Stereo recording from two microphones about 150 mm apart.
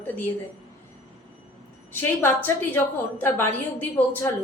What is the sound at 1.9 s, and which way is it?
A woman's voice, 15° left (ahead or behind).